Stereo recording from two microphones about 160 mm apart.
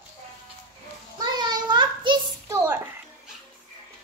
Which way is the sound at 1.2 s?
25° right (ahead or behind).